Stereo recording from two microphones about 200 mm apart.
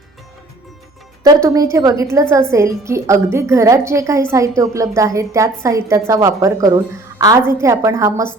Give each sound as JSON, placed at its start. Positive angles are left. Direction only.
{"t": 1.2, "sound": "a woman's voice", "side_deg": -15}